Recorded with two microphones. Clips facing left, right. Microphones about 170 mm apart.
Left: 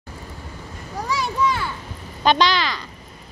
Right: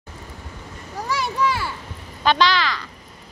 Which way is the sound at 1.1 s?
5° right (ahead or behind).